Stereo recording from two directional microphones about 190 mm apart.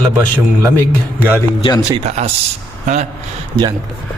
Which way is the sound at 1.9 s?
35° right (ahead or behind).